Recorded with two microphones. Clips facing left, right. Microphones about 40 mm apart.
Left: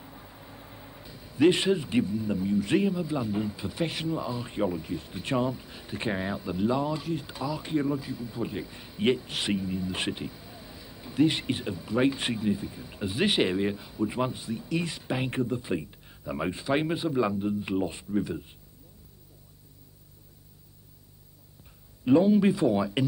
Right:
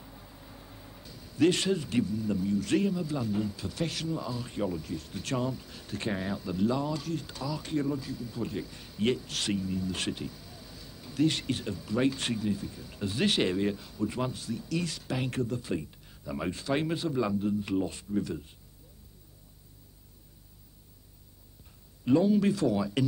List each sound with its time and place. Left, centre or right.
0.0 s a man's voice: centre
22.0 s a man's voice: centre